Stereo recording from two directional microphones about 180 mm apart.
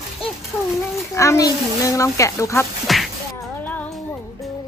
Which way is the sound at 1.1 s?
15° left (ahead or behind).